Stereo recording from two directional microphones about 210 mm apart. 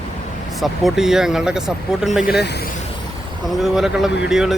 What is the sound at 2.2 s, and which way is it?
Speech, 50° left (ahead or behind).